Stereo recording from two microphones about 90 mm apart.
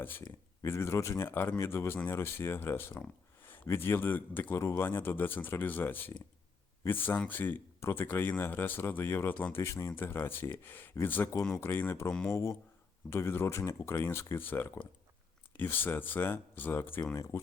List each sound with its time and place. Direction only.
0.0 s speech: 25° left (ahead or behind)